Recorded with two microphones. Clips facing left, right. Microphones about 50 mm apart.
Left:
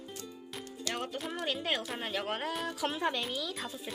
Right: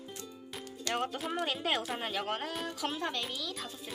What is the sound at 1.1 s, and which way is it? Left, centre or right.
Speech, centre.